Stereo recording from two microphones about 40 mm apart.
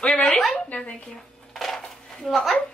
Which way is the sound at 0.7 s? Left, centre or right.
Left.